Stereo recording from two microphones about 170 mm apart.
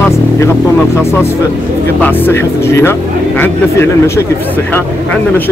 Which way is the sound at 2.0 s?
10° left (ahead or behind).